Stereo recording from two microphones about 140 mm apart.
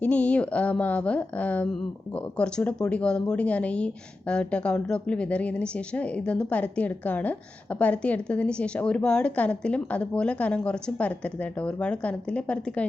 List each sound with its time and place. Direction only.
0.0 s speech: 10° left (ahead or behind)